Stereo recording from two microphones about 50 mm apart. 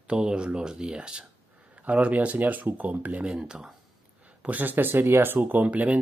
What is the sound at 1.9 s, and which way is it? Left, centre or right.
Speech, right.